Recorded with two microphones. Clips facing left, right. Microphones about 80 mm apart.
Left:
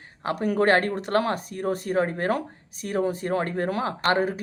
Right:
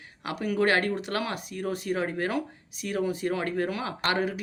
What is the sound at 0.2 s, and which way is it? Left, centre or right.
Speech, left.